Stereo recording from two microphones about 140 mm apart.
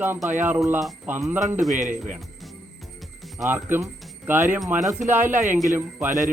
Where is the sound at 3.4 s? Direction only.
15° right (ahead or behind).